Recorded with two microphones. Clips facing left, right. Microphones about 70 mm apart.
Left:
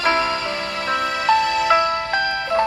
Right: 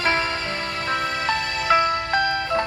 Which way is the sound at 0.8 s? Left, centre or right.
Left.